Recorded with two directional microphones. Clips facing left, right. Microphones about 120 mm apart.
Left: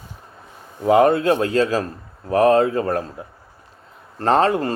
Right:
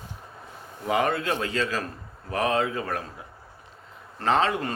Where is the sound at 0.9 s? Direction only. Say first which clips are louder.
Left 10 dB; 45° left (ahead or behind).